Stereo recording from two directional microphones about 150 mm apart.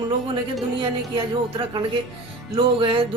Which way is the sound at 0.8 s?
35° right (ahead or behind).